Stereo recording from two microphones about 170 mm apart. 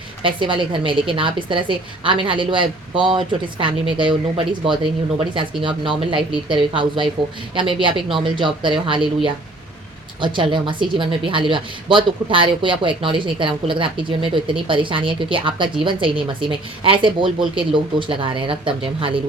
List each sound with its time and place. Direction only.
0.2 s speech: 30° right (ahead or behind)